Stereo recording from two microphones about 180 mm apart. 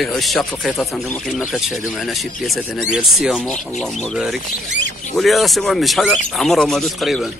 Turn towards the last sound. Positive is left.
turn(degrees=0)  # may be behind; listen again after turning